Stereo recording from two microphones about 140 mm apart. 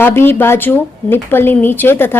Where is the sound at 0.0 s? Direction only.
15° left (ahead or behind).